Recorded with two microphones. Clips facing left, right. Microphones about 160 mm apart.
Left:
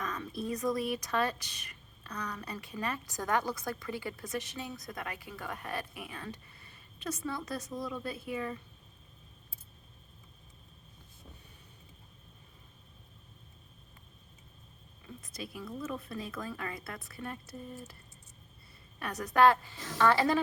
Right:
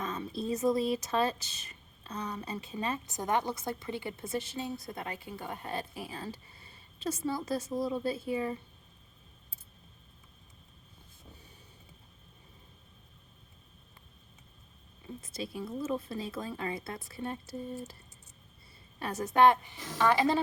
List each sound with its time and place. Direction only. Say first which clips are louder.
0.0 s speech: right 2 dB; 25° right (ahead or behind)
15.0 s speech: right 4 dB; 25° right (ahead or behind)
18.9 s speech: right 1 dB; 30° right (ahead or behind)